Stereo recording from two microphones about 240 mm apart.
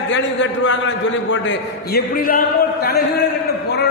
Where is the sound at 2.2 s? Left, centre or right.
Left.